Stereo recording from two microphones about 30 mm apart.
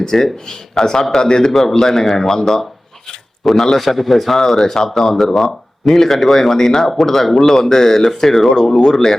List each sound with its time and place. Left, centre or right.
0.0 s speech: centre
1.8 s a man's voice: centre
5.1 s a man's voice: centre